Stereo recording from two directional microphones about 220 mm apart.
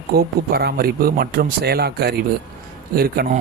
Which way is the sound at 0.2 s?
45° right (ahead or behind).